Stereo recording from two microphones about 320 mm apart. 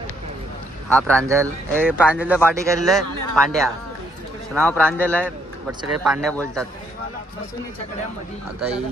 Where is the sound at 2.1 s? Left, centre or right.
Centre.